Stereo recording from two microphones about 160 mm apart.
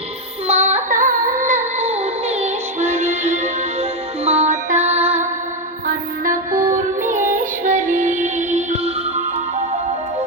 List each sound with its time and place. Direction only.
0.4 s music: 45° right (ahead or behind)
5.9 s mantra: 55° right (ahead or behind)
6.7 s music: 50° right (ahead or behind)